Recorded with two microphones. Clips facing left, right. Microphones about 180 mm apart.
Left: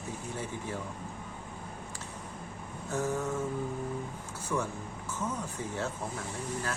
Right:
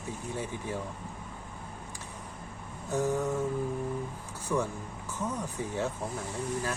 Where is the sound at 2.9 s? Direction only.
15° right (ahead or behind).